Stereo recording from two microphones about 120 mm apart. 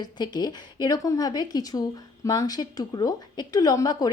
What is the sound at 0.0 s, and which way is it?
A woman's voice, 35° left (ahead or behind).